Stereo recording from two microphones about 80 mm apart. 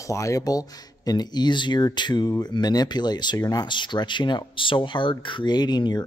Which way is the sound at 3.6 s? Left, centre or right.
Left.